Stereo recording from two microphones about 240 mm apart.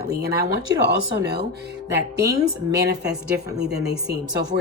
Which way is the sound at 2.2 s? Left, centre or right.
Centre.